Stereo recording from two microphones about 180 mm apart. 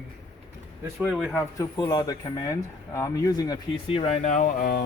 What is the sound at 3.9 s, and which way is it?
Speech, 35° left (ahead or behind).